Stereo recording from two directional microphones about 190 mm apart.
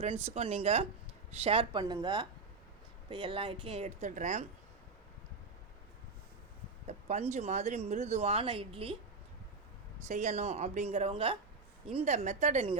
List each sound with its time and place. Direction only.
0.0 s speech: 35° right (ahead or behind)
6.8 s speech: 35° right (ahead or behind)
10.1 s speech: 40° right (ahead or behind)